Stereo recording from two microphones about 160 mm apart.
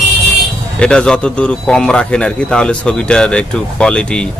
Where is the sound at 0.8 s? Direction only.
5° left (ahead or behind).